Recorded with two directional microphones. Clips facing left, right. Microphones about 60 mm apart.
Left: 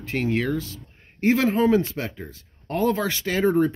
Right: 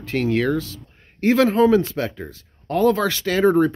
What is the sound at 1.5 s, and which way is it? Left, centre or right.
Speech, left.